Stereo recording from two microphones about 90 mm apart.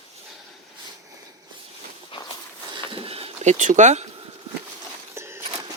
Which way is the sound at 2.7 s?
80° right.